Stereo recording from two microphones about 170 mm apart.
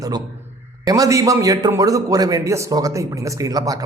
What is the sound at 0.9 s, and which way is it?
A man's voice, 20° right (ahead or behind).